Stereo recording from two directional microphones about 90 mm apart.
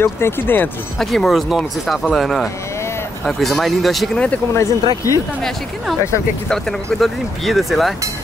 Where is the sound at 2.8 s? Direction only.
30° left (ahead or behind).